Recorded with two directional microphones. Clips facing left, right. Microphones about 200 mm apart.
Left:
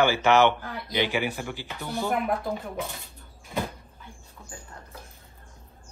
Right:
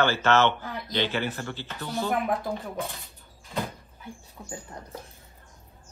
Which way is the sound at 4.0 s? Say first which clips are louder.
Right 5 dB; 15° right (ahead or behind).